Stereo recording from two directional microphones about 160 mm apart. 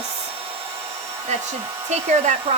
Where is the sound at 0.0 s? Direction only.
35° right (ahead or behind).